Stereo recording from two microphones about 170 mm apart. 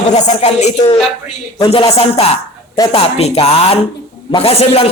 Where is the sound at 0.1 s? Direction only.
40° left (ahead or behind).